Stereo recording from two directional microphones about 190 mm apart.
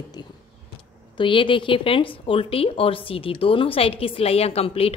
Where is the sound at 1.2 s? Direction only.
25° left (ahead or behind).